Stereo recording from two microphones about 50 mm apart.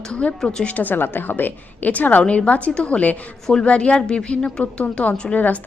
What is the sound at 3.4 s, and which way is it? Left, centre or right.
A woman's voice, centre.